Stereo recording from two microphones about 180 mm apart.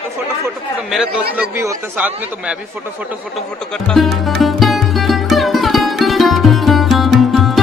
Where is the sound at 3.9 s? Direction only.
Centre (ahead or behind).